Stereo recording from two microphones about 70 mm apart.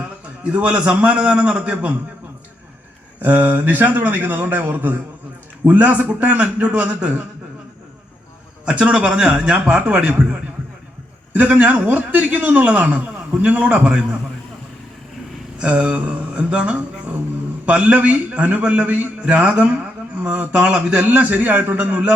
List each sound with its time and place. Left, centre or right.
0.0 s a man's voice: centre
3.2 s a man's voice: right
8.6 s a man's voice: centre
15.6 s a man's voice: centre